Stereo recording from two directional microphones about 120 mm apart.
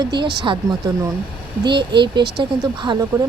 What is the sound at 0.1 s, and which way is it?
Speech, 40° right (ahead or behind).